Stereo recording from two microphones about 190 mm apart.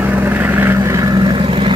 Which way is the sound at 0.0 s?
10° right (ahead or behind).